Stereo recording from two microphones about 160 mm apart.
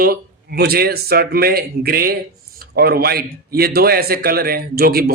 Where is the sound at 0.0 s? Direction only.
75° right (ahead or behind).